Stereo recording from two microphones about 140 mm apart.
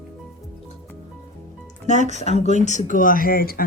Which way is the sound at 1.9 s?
55° left (ahead or behind).